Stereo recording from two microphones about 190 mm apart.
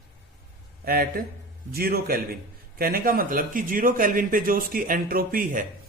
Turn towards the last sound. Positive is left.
turn(degrees=-45)  # may be behind; listen again after turning